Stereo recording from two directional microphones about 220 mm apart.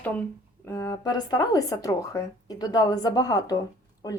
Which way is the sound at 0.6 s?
15° left (ahead or behind).